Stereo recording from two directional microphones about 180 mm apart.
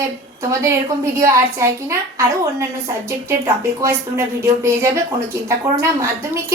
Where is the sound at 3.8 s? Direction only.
15° right (ahead or behind).